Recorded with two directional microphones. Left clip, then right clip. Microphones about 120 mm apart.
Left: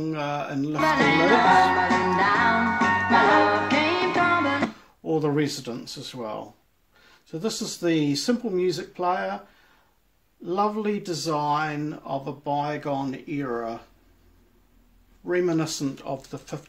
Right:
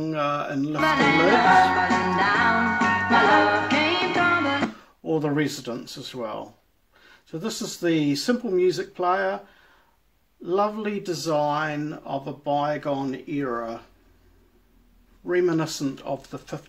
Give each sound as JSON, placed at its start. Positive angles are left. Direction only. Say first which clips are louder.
{"t": 0.0, "sound": "speech", "louder": "right 3 dB", "side_deg": 35}
{"t": 0.7, "sound": "music", "louder": "right 1 dB", "side_deg": -5}
{"t": 5.0, "sound": "speech", "louder": "even", "side_deg": 40}
{"t": 10.4, "sound": "speech", "louder": "right 1 dB", "side_deg": 40}
{"t": 15.2, "sound": "speech", "louder": "right 1 dB", "side_deg": 40}